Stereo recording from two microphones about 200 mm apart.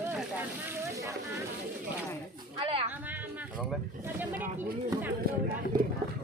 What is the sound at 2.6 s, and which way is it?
Speech, 25° right (ahead or behind).